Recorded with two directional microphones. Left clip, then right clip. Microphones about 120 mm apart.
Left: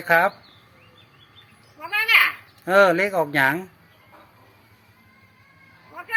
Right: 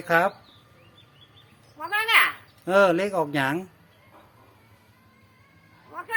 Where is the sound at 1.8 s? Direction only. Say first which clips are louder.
Left 3 dB; 55° right (ahead or behind).